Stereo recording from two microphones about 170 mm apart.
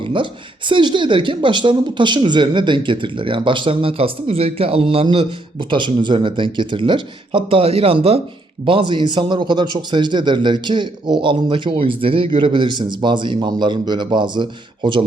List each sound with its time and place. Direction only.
0.0 s a woman's voice: 30° right (ahead or behind)